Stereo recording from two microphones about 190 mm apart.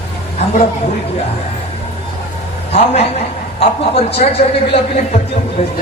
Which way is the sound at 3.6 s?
30° left (ahead or behind).